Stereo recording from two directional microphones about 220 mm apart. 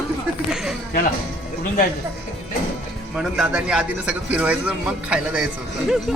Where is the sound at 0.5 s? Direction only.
Centre (ahead or behind).